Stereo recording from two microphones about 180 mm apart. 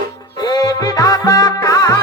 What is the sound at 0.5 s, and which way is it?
Music, 20° left (ahead or behind).